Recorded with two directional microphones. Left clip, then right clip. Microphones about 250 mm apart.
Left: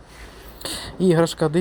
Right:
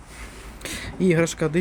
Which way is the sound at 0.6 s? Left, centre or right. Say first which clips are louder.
Left 2 dB; centre.